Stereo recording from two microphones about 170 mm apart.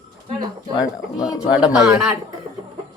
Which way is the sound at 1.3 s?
20° left (ahead or behind).